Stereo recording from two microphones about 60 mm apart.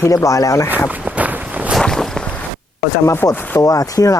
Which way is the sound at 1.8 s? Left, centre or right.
Centre.